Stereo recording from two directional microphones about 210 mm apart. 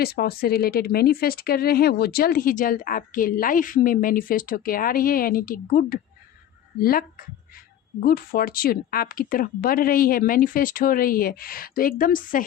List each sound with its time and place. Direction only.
0.0 s speech: 50° left (ahead or behind)